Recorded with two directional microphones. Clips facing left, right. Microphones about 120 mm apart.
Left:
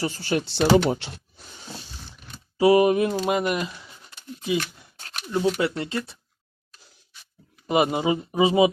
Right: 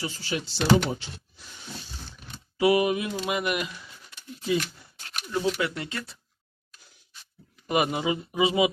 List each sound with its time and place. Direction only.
0.0 s speech: 55° left (ahead or behind)
2.6 s speech: 35° left (ahead or behind)
7.7 s speech: 25° left (ahead or behind)